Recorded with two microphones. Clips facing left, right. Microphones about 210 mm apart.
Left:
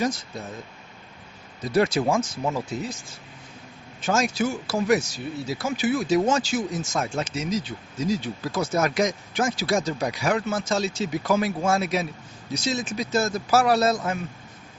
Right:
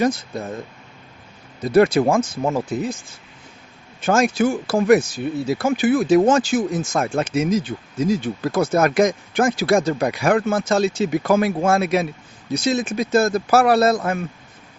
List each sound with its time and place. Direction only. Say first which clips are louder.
0.0 s speech: right 6 dB; 55° right (ahead or behind)
1.6 s speech: right 7 dB; 55° right (ahead or behind)
4.0 s speech: right 6 dB; 55° right (ahead or behind)